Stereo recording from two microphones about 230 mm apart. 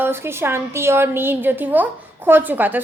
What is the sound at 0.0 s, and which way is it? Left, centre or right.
A woman's voice, centre.